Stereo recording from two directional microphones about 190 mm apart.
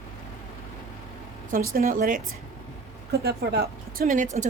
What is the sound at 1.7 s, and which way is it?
Speech, 45° right (ahead or behind).